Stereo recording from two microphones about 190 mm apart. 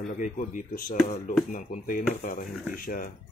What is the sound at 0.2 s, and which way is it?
Speech, 45° left (ahead or behind).